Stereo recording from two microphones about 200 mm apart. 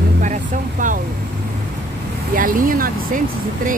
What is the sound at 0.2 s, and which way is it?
Vehicle, 40° right (ahead or behind).